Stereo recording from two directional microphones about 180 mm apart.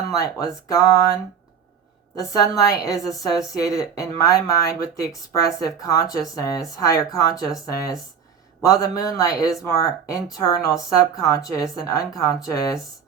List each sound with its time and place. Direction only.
0.1 s speech: 20° left (ahead or behind)
8.6 s speech: 20° left (ahead or behind)